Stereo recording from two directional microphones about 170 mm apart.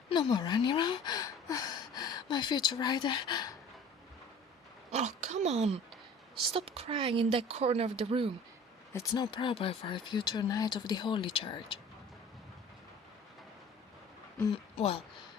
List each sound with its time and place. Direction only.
0.1 s speech: 25° left (ahead or behind)
4.9 s speech: 45° right (ahead or behind)
8.9 s speech: 20° left (ahead or behind)
14.5 s speech: 35° left (ahead or behind)